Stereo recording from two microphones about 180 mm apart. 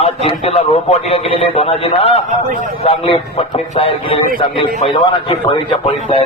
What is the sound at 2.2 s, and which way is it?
Speech, 45° right (ahead or behind).